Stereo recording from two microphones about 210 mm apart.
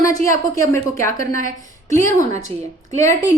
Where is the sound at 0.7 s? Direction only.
15° left (ahead or behind).